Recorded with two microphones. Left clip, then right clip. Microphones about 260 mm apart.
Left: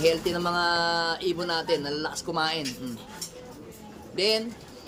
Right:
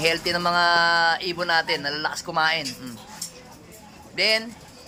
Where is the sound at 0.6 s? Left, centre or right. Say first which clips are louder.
Right 8 dB; centre.